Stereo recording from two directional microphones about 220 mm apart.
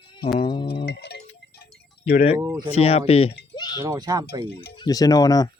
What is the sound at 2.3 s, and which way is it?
Speech, 15° right (ahead or behind).